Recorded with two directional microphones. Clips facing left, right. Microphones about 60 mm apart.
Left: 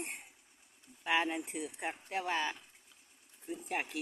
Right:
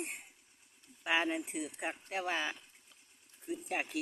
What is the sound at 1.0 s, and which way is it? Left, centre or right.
Speech, centre.